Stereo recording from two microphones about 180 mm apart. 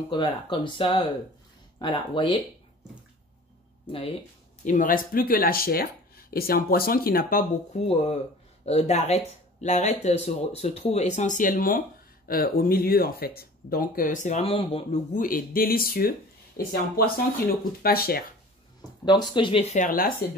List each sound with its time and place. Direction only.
0.1 s speech: 25° left (ahead or behind)
3.8 s speech: 30° left (ahead or behind)
4.6 s speech: 45° left (ahead or behind)
7.9 s speech: 35° left (ahead or behind)
15.1 s speech: 50° left (ahead or behind)
19.0 s speech: 25° left (ahead or behind); by 20.2 s 50° left (ahead or behind)